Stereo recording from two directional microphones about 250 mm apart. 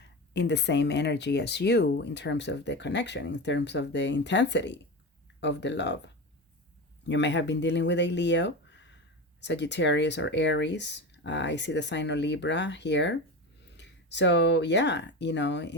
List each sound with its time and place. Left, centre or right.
0.3 s speech: left
7.0 s speech: left